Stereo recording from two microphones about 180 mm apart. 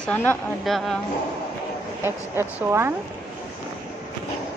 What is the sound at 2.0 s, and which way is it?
Speech, 15° right (ahead or behind).